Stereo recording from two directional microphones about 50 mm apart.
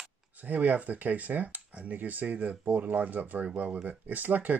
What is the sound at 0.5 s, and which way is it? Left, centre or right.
Speech, right.